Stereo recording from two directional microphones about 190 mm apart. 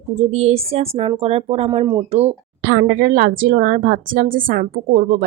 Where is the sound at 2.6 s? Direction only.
55° right (ahead or behind).